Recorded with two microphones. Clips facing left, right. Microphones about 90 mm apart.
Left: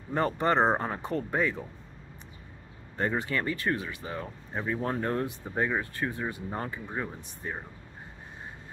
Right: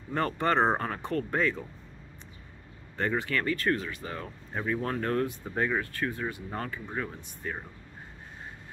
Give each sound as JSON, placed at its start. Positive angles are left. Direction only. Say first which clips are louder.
{"t": 0.3, "sound": "speech", "louder": "even", "side_deg": 20}
{"t": 3.0, "sound": "speech", "louder": "even", "side_deg": 20}